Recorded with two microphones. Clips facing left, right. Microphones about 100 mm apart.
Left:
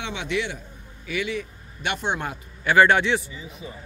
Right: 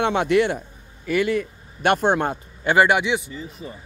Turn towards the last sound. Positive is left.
turn(degrees=-10)  # may be behind; listen again after turning